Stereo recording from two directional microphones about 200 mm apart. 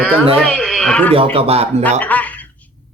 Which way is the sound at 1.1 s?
30° right (ahead or behind).